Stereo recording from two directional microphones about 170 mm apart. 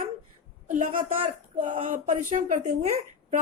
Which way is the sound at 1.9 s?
50° right (ahead or behind).